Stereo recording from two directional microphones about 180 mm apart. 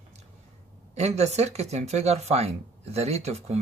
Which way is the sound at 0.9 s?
40° right (ahead or behind).